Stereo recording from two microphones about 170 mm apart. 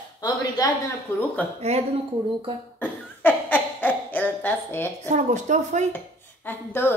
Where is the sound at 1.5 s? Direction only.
40° right (ahead or behind).